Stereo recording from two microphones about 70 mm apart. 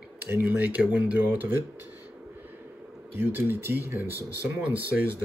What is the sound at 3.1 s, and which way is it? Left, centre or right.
Speech, right.